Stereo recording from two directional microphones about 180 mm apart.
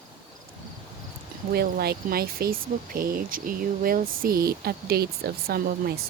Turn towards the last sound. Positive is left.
turn(degrees=-60)  # may be behind; listen again after turning